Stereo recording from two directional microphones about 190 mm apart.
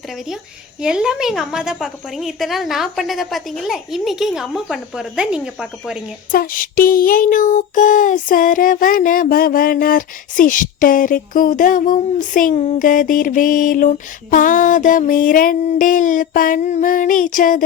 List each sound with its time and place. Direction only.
0.8 s a woman's voice: 5° right (ahead or behind)
6.3 s child singing: 50° left (ahead or behind)